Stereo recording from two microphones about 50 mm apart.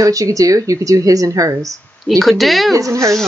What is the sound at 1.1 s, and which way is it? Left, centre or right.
Speech, right.